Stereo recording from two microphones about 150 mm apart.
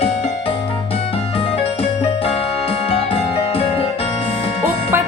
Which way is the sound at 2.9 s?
40° left (ahead or behind).